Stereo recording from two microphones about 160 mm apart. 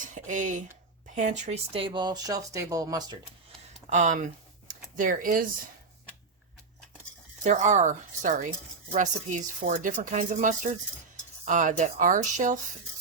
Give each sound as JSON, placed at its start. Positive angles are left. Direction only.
{"t": 0.0, "sound": "speech", "side_deg": -50}
{"t": 3.8, "sound": "speech", "side_deg": -50}
{"t": 7.4, "sound": "speech", "side_deg": -45}